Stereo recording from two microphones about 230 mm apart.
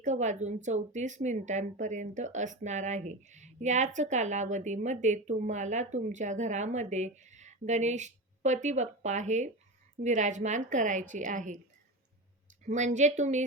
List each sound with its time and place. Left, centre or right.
0.0 s speech: right
12.6 s speech: right